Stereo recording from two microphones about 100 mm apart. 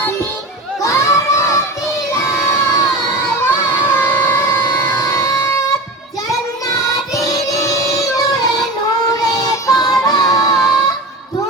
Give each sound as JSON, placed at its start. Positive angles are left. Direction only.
{"t": 0.8, "sound": "crowd", "side_deg": 30}
{"t": 2.2, "sound": "children shouting", "side_deg": 30}
{"t": 6.7, "sound": "music", "side_deg": 35}